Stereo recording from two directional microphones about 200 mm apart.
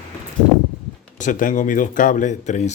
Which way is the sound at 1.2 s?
40° left (ahead or behind).